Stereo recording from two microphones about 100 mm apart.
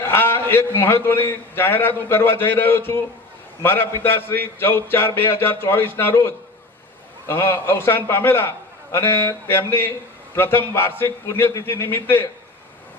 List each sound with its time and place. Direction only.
0.0 s a man's voice: 25° left (ahead or behind)
7.3 s a man's voice: 25° left (ahead or behind)